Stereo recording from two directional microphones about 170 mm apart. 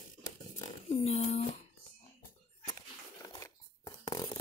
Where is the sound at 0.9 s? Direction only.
40° left (ahead or behind).